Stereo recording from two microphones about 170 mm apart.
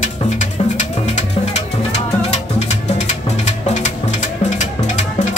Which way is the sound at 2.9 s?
45° left (ahead or behind).